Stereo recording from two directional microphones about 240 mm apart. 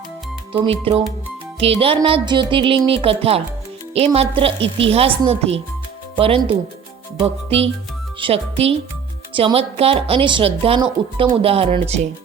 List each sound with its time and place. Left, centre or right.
0.5 s speech: right